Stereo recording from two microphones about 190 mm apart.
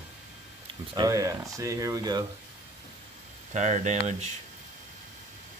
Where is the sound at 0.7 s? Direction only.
20° right (ahead or behind).